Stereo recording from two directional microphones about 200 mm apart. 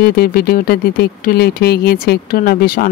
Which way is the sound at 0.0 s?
50° left (ahead or behind).